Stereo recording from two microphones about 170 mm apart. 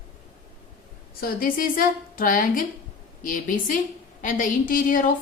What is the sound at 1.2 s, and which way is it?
A woman's voice, 60° left (ahead or behind).